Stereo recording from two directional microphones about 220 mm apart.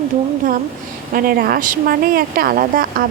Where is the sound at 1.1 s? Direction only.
40° right (ahead or behind).